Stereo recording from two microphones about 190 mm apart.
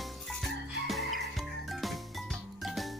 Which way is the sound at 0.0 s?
Centre (ahead or behind).